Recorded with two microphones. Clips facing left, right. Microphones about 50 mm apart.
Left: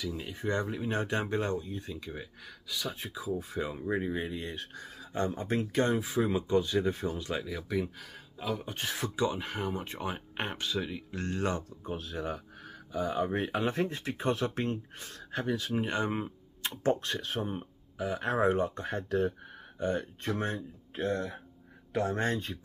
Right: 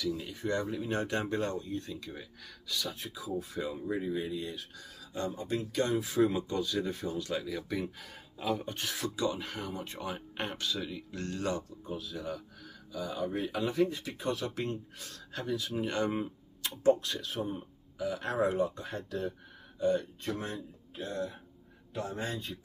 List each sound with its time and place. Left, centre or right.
0.0 s speech: left
3.0 s speech: left
6.0 s speech: centre
7.4 s speech: centre
8.7 s speech: left
17.9 s speech: left